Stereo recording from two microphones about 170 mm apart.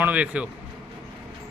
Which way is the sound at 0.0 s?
10° right (ahead or behind).